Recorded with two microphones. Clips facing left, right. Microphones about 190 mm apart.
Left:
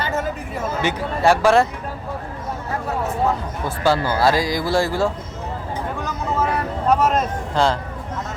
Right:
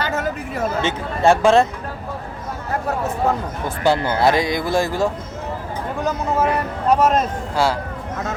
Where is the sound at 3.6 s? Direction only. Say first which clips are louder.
Right 1 dB; 20° right (ahead or behind).